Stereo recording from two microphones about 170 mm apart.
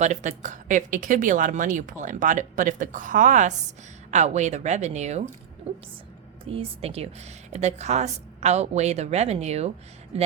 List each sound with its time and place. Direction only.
0.0 s speech: 45° right (ahead or behind)
6.5 s a woman's voice: 35° right (ahead or behind)